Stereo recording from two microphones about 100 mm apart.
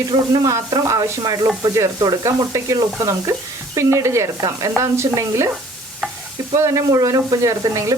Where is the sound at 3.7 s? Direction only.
30° right (ahead or behind).